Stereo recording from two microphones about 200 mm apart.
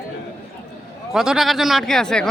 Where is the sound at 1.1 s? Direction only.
Centre (ahead or behind).